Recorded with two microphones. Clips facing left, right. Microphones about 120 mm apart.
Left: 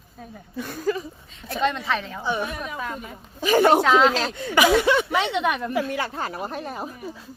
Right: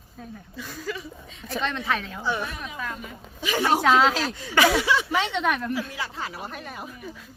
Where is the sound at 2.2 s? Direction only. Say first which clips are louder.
Left 2 dB; 15° left (ahead or behind).